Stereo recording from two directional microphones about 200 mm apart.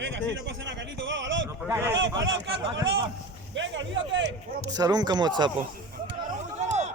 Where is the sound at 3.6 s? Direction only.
65° right (ahead or behind).